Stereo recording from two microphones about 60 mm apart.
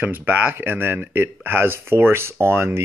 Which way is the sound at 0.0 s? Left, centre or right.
Right.